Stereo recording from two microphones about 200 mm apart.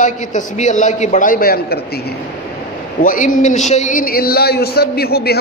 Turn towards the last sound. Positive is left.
turn(degrees=50)  # may be behind; listen again after turning